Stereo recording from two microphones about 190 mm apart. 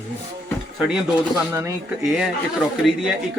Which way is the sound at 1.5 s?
15° right (ahead or behind).